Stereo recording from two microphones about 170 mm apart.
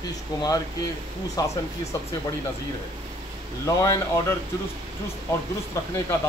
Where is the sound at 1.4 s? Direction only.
20° left (ahead or behind).